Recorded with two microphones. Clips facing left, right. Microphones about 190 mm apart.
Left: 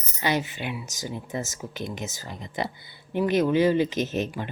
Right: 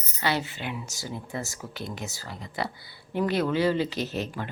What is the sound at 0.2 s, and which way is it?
Speech, 15° left (ahead or behind).